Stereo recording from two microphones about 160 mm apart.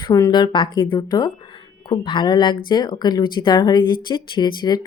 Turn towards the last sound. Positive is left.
turn(degrees=25)  # may be behind; listen again after turning